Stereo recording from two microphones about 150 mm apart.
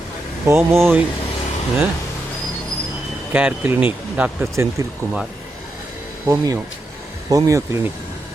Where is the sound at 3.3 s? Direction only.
10° right (ahead or behind).